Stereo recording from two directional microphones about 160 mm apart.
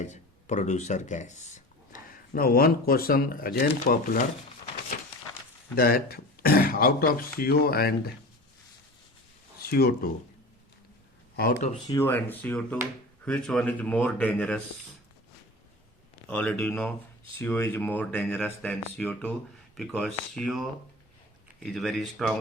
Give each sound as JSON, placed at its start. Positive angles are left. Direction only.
{"t": 0.0, "sound": "speech", "side_deg": 45}
{"t": 5.7, "sound": "speech", "side_deg": 70}
{"t": 9.6, "sound": "speech", "side_deg": 75}
{"t": 11.9, "sound": "speech", "side_deg": 15}
{"t": 16.3, "sound": "speech", "side_deg": 10}